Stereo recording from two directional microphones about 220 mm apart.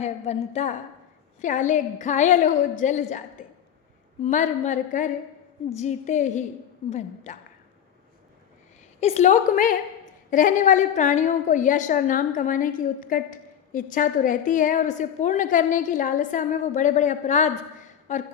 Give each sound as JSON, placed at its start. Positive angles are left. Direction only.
{"t": 0.0, "sound": "a woman's voice", "side_deg": 30}
{"t": 9.0, "sound": "a woman's voice", "side_deg": 30}